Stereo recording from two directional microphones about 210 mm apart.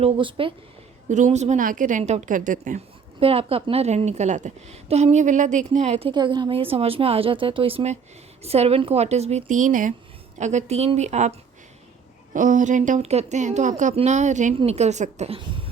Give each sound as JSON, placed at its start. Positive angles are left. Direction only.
{"t": 0.0, "sound": "speech", "side_deg": -25}
{"t": 1.0, "sound": "a woman's voice", "side_deg": -35}